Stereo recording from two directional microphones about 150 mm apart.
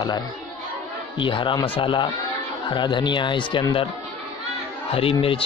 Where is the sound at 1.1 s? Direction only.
35° left (ahead or behind).